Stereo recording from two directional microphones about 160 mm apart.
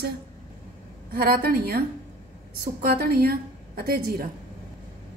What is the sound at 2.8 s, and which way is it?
A woman's voice, 70° right (ahead or behind).